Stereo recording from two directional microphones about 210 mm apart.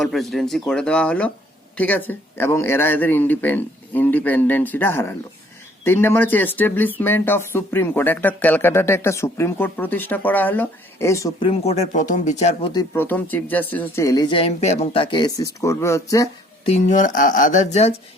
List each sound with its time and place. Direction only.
0.0 s speech: centre (ahead or behind); by 12.7 s 30° left (ahead or behind)
12.7 s speech: 10° left (ahead or behind)
16.6 s speech: 30° left (ahead or behind)